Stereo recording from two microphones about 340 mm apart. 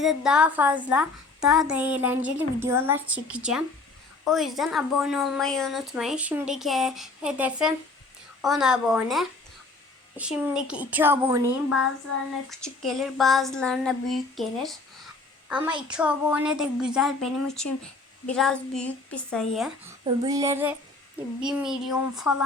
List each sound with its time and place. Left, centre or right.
0.0 s a child's voice: centre
20.1 s female singing: centre
21.4 s a child's voice: centre